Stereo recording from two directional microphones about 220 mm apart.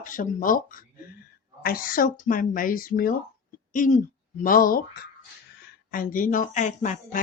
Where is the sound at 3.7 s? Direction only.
35° left (ahead or behind).